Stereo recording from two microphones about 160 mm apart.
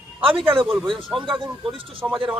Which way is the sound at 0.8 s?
Centre (ahead or behind).